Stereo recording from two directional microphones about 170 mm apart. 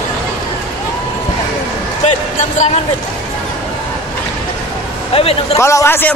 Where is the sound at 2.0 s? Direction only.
45° left (ahead or behind).